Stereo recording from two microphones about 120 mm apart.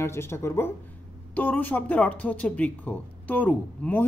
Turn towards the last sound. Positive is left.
turn(degrees=15)  # may be behind; listen again after turning